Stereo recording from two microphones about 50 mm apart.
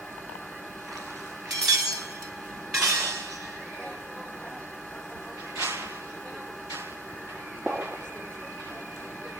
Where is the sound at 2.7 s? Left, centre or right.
Right.